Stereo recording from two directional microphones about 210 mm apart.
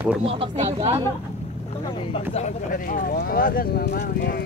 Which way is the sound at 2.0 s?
30° left (ahead or behind).